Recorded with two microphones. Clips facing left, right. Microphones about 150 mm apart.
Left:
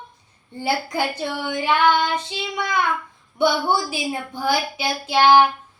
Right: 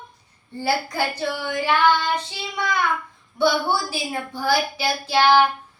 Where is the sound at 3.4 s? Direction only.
20° left (ahead or behind).